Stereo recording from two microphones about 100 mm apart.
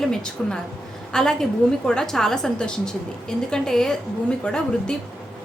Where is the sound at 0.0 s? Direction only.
5° left (ahead or behind).